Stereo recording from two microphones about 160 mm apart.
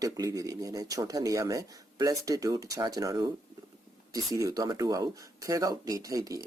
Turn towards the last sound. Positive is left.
turn(degrees=-20)  # may be behind; listen again after turning